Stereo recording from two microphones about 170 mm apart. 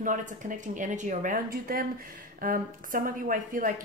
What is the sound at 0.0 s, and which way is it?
A woman's voice, 50° right (ahead or behind).